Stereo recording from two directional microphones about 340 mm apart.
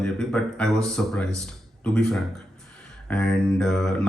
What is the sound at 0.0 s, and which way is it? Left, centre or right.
Speech, centre.